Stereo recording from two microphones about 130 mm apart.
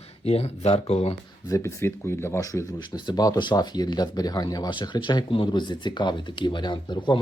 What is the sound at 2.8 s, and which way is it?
Speech, 35° left (ahead or behind).